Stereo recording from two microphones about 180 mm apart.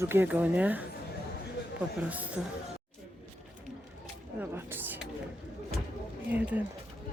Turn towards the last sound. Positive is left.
turn(degrees=-10)  # may be behind; listen again after turning